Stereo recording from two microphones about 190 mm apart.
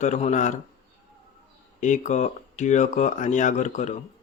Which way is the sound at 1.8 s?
40° left (ahead or behind).